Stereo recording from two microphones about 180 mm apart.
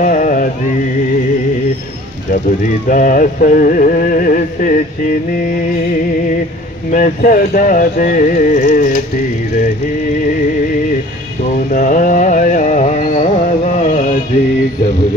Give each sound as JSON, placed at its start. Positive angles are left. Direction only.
{"t": 0.0, "sound": "music", "side_deg": 50}
{"t": 2.9, "sound": "music", "side_deg": 50}
{"t": 6.9, "sound": "music", "side_deg": 50}
{"t": 11.7, "sound": "carnatic music", "side_deg": 50}